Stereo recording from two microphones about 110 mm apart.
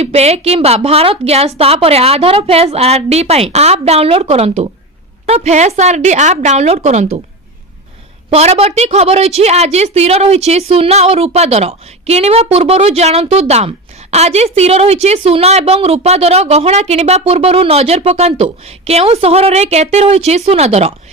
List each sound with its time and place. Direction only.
0.0 s a woman's voice: 70° right (ahead or behind); by 7.2 s 85° right
8.3 s a woman's voice: 70° right (ahead or behind)